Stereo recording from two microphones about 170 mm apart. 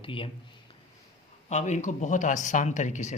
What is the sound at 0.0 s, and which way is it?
Speech, 30° left (ahead or behind).